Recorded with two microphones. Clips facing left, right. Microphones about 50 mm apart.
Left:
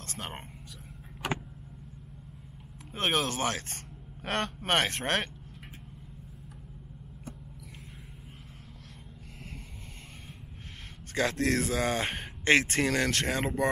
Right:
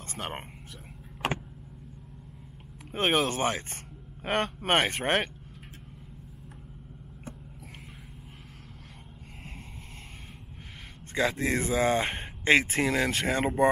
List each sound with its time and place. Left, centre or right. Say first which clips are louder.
0.0 s a sound: right 3 dB; right
2.9 s speech: right 3 dB; right
11.1 s speech: right 1 dB; centre